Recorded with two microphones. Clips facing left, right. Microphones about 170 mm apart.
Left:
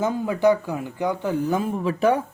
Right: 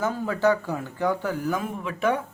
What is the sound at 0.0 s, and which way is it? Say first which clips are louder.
Speech: left 3 dB; 15° left (ahead or behind).